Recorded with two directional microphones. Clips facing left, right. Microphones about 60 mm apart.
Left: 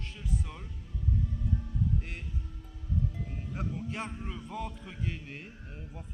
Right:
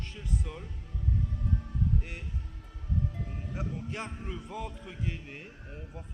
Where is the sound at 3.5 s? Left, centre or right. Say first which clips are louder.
Left 1 dB; centre.